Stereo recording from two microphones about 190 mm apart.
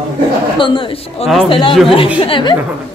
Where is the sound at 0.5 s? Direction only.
25° left (ahead or behind).